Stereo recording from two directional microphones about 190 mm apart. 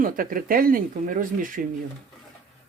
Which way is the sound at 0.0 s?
50° right (ahead or behind).